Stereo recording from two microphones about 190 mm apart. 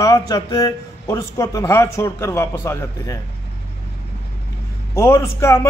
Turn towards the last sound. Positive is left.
turn(degrees=15)  # may be behind; listen again after turning